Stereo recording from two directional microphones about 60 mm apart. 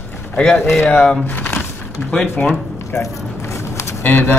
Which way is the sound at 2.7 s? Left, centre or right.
Left.